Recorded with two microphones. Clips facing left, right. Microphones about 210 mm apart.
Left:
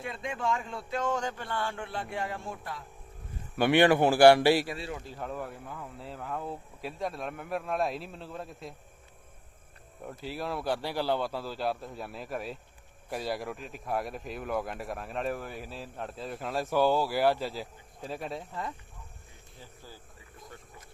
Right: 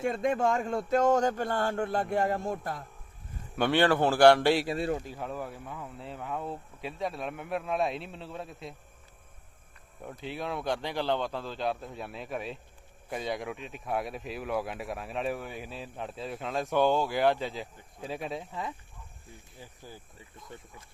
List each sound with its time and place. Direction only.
0.0 s speech: 45° right (ahead or behind)
3.6 s a man's voice: 15° left (ahead or behind)
5.0 s speech: 5° right (ahead or behind)
10.0 s speech: centre (ahead or behind)